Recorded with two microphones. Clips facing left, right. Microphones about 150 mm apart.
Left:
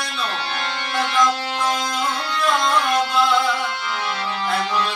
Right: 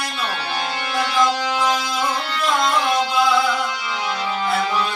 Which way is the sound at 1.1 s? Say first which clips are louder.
Right 1 dB; 5° right (ahead or behind).